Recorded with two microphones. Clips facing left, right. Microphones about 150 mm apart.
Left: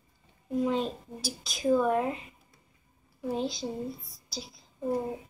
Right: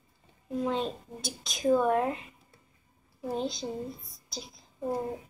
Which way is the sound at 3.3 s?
Centre (ahead or behind).